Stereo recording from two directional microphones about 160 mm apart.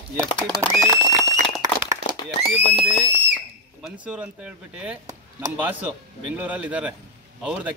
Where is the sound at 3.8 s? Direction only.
5° right (ahead or behind).